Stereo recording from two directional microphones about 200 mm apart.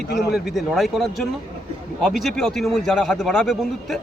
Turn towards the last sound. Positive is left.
turn(degrees=0)  # may be behind; listen again after turning